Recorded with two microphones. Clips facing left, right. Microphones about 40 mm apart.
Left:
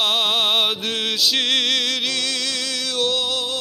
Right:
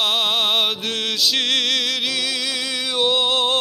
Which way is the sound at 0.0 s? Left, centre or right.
Centre.